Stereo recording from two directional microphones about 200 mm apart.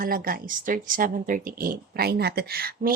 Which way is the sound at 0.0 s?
45° right (ahead or behind).